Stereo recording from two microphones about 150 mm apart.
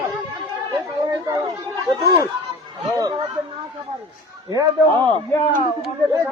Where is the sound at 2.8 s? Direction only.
25° right (ahead or behind).